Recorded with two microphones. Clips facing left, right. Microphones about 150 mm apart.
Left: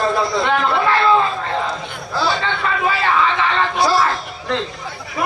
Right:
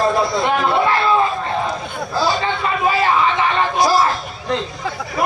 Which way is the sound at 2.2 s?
20° right (ahead or behind).